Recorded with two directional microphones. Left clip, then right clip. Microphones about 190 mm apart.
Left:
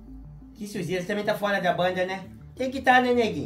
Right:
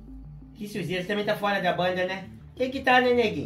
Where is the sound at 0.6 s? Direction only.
15° left (ahead or behind).